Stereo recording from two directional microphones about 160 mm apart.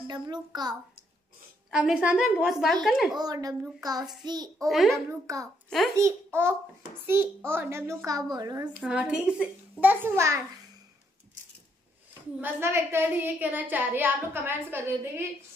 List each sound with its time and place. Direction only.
0.0 s speech: 25° right (ahead or behind)
1.7 s a woman's voice: 5° right (ahead or behind)
3.2 s speech: 25° right (ahead or behind)
4.6 s a woman's voice: centre (ahead or behind)
5.2 s a woman's voice: 20° right (ahead or behind)
7.5 s a woman's voice: 15° right (ahead or behind)
8.8 s a woman's voice: 5° right (ahead or behind)
12.1 s a woman's voice: 15° right (ahead or behind)